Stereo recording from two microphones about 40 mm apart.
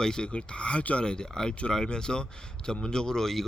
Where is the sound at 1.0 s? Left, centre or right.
Left.